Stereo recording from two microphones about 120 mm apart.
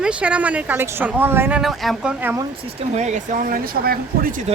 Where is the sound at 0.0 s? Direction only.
10° right (ahead or behind).